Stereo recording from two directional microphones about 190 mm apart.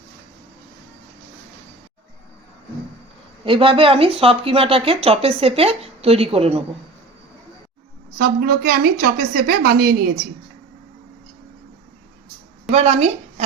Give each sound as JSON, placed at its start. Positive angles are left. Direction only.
{"t": 3.4, "sound": "speech", "side_deg": -25}
{"t": 8.2, "sound": "a woman's voice", "side_deg": -55}
{"t": 12.7, "sound": "speech", "side_deg": -35}